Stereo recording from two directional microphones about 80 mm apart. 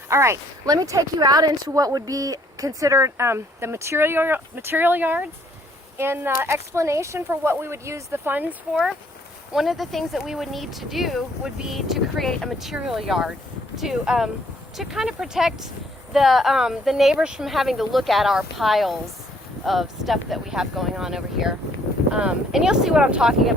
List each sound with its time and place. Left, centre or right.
0.1 s speech: right
0.6 s speech: right
8.7 s speech: centre